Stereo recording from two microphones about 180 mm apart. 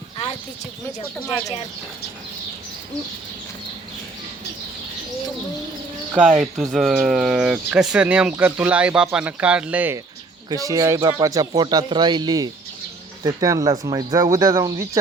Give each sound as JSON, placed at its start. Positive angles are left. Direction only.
{"t": 6.1, "sound": "speech", "side_deg": -5}
{"t": 10.5, "sound": "speech", "side_deg": -20}